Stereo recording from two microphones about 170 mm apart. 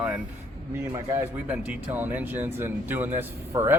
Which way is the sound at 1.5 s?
10° right (ahead or behind).